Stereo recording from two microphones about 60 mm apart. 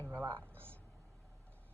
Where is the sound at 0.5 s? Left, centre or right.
Right.